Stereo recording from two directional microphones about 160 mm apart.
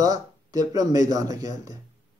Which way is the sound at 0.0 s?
25° right (ahead or behind).